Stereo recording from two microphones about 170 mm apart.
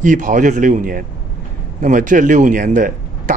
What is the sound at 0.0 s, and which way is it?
Speech, 50° right (ahead or behind).